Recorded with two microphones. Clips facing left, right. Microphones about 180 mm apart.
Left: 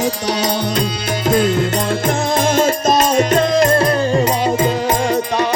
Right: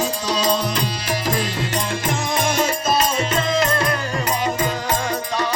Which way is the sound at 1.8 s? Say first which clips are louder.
Left 6 dB; 60° left (ahead or behind).